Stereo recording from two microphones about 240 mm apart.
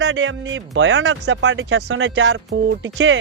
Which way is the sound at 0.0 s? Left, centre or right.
Right.